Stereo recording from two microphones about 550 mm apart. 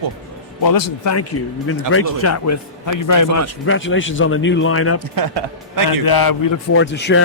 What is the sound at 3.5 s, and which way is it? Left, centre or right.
Speech, left.